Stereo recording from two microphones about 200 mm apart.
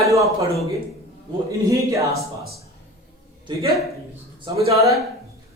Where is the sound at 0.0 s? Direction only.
15° right (ahead or behind).